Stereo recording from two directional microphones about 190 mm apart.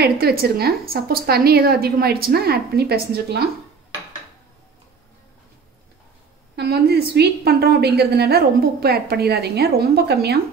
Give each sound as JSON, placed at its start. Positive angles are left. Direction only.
{"t": 0.0, "sound": "a woman's voice", "side_deg": -55}
{"t": 6.5, "sound": "a woman's voice", "side_deg": -60}